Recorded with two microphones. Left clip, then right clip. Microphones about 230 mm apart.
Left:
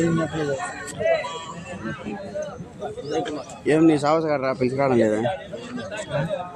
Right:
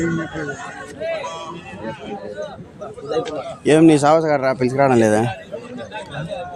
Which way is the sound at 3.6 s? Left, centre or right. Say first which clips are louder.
Right 6 dB; right.